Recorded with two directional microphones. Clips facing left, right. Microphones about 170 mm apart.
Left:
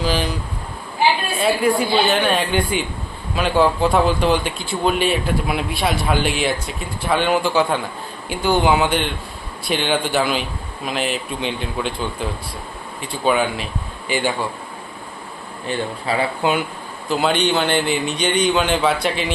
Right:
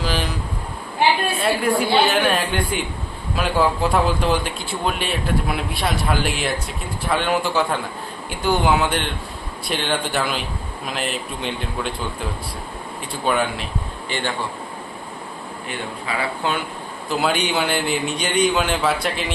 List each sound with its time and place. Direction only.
0.0 s a sound: centre (ahead or behind)
1.0 s a sound: 60° right (ahead or behind)
1.4 s speech: centre (ahead or behind)
13.2 s a man's voice: centre (ahead or behind)
15.6 s a man's voice: 30° left (ahead or behind)
16.4 s a man's voice: 15° left (ahead or behind)
17.1 s speech: centre (ahead or behind)